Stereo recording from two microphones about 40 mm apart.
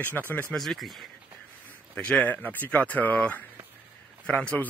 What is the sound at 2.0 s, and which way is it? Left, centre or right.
Speech, left.